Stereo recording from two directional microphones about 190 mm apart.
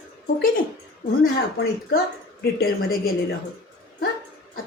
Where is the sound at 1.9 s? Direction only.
55° left (ahead or behind).